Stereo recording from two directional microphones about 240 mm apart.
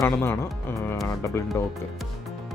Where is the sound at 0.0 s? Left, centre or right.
Centre.